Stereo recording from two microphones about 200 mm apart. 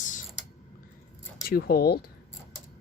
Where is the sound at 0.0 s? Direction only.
40° left (ahead or behind).